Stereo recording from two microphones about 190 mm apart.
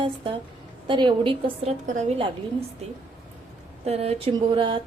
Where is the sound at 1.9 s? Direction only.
30° right (ahead or behind).